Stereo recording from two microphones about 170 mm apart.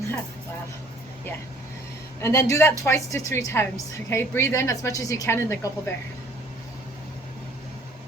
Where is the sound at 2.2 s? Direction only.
15° left (ahead or behind).